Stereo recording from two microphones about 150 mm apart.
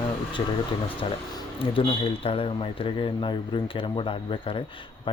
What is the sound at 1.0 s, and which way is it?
Speech, 35° left (ahead or behind).